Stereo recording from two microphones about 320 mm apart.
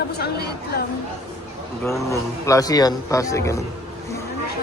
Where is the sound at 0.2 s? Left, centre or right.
Left.